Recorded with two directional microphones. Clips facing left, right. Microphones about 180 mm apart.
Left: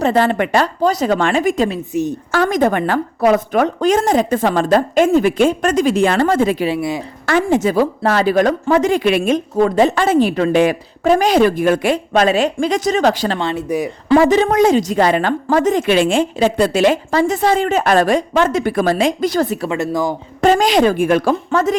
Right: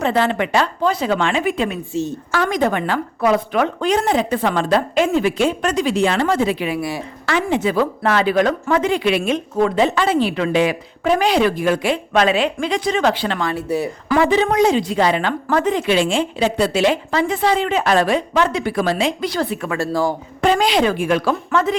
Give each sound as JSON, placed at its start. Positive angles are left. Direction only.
{"t": 0.0, "sound": "speech", "side_deg": 40}
{"t": 1.9, "sound": "speech", "side_deg": 15}
{"t": 2.3, "sound": "speech", "side_deg": 45}
{"t": 6.7, "sound": "speech", "side_deg": 20}
{"t": 7.3, "sound": "speech", "side_deg": 45}
{"t": 13.5, "sound": "speech", "side_deg": 15}
{"t": 14.1, "sound": "speech", "side_deg": 40}
{"t": 15.4, "sound": "speech", "side_deg": 35}
{"t": 15.9, "sound": "speech", "side_deg": 55}
{"t": 19.6, "sound": "speech", "side_deg": 20}
{"t": 20.4, "sound": "speech", "side_deg": 45}